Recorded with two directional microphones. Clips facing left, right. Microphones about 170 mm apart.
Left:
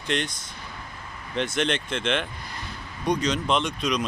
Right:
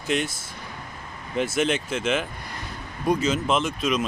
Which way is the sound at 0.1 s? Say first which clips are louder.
Right 2 dB; 5° right (ahead or behind).